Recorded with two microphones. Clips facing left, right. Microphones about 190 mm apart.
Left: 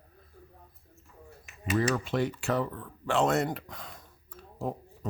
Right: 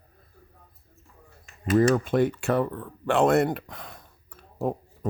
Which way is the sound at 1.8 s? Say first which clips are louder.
Right 7 dB; 50° right (ahead or behind).